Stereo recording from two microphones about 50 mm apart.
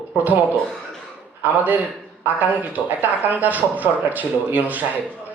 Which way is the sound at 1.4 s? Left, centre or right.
Right.